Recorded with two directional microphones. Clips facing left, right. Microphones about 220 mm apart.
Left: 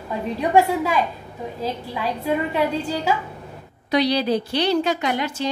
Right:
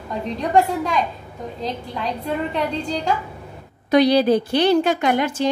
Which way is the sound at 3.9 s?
50° right (ahead or behind).